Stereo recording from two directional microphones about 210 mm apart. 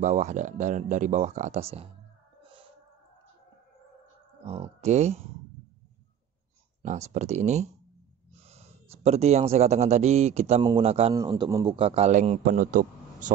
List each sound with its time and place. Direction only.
0.0 s speech: 35° right (ahead or behind)
4.5 s speech: 30° right (ahead or behind)
6.8 s a man's voice: 35° right (ahead or behind)